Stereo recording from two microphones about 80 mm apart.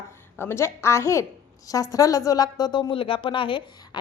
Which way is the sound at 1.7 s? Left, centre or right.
Left.